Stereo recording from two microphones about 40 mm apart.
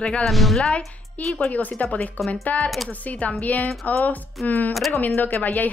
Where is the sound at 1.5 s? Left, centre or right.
Left.